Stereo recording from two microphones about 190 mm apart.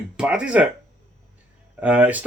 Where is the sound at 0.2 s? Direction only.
5° right (ahead or behind).